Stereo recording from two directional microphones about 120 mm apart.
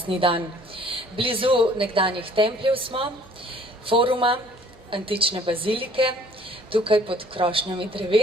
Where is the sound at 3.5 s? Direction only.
45° right (ahead or behind).